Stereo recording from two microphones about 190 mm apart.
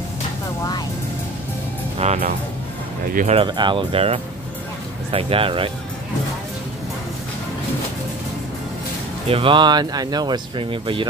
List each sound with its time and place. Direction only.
2.0 s speech: 40° right (ahead or behind)
9.3 s speech: 25° right (ahead or behind)